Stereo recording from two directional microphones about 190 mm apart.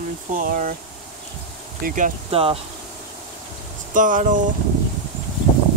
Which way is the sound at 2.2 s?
30° right (ahead or behind).